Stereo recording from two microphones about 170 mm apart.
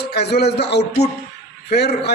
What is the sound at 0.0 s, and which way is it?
A man's voice, 75° left (ahead or behind).